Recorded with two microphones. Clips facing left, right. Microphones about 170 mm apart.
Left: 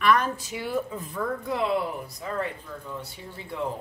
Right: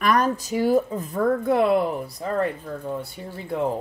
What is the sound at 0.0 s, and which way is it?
Speech, 40° right (ahead or behind).